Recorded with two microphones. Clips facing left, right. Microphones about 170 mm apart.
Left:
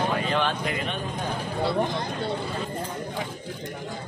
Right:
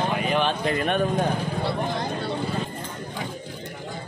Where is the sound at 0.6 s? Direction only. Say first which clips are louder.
Right 5 dB; 40° right (ahead or behind).